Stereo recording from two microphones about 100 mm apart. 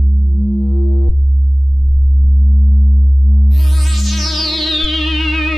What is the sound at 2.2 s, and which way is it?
Sine wave, 25° right (ahead or behind).